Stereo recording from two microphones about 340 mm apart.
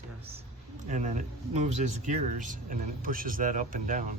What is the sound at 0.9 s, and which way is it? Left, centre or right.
A man's voice, right.